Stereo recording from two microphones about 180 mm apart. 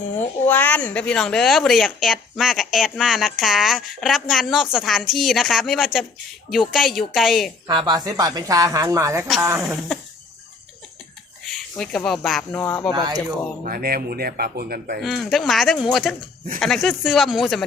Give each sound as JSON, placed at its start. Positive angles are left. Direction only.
{"t": 0.4, "sound": "speech", "side_deg": 10}
{"t": 7.7, "sound": "speech", "side_deg": -25}
{"t": 11.4, "sound": "speech", "side_deg": 0}
{"t": 12.9, "sound": "speech", "side_deg": -20}
{"t": 13.7, "sound": "speech", "side_deg": -55}
{"t": 15.0, "sound": "speech", "side_deg": 0}